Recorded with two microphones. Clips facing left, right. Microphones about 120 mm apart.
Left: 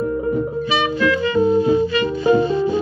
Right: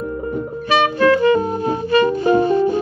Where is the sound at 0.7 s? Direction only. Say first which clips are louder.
Right 7 dB; 55° right (ahead or behind).